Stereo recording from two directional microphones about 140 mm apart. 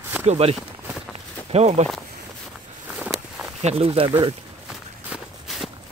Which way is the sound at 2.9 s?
5° right (ahead or behind).